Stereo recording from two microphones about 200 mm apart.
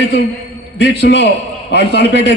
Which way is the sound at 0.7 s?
60° left (ahead or behind).